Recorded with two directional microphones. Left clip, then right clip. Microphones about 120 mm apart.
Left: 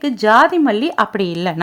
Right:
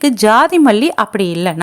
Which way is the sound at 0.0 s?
35° right (ahead or behind).